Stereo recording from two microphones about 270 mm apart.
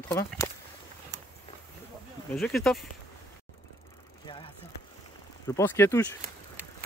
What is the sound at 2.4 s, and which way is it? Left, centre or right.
Speech, centre.